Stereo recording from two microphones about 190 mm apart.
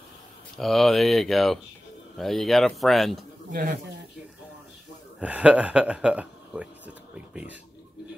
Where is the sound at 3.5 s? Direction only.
50° right (ahead or behind).